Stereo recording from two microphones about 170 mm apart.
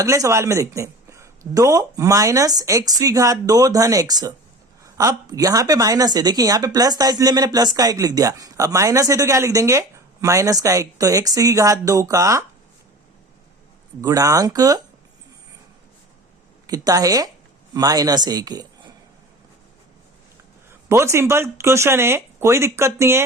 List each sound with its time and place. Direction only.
0.0 s a woman's voice: 15° right (ahead or behind)
14.0 s a woman's voice: 20° right (ahead or behind)
16.6 s a woman's voice: 20° right (ahead or behind)
20.7 s speech: 15° right (ahead or behind)